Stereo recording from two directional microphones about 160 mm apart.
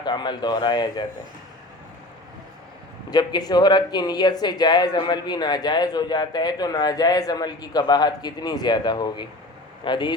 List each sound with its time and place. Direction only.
0.0 s speech: 25° left (ahead or behind)
3.1 s speech: 25° left (ahead or behind)